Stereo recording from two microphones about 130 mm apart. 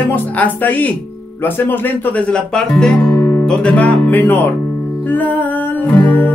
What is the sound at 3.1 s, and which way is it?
Music, 20° left (ahead or behind).